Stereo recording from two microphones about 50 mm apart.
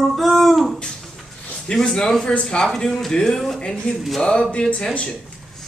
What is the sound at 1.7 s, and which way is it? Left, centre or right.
A man's voice, left.